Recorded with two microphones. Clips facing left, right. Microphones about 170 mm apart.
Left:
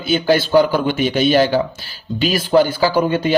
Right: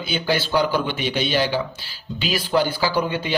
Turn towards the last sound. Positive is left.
turn(degrees=50)  # may be behind; listen again after turning